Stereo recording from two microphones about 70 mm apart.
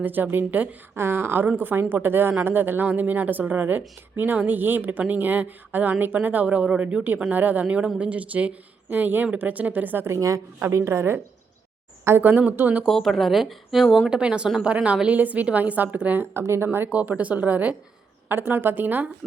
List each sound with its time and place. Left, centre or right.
0.0 s a woman's voice: right
10.1 s a woman's voice: right
12.2 s speech: right
12.8 s speech: centre
14.1 s speech: centre
16.3 s a woman's voice: right
16.9 s speech: centre